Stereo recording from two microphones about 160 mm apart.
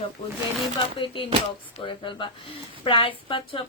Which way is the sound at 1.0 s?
35° left (ahead or behind).